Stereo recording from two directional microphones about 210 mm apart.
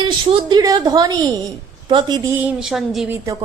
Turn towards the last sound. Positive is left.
turn(degrees=0)  # may be behind; listen again after turning